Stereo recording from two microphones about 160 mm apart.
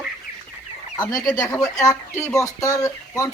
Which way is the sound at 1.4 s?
20° left (ahead or behind).